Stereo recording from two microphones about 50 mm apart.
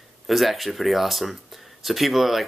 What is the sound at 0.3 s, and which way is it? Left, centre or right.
Speech, centre.